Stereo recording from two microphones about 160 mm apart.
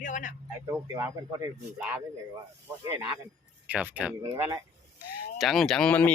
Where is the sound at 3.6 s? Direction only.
10° right (ahead or behind).